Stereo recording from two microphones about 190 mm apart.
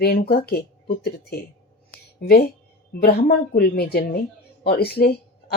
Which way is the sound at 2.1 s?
55° left (ahead or behind).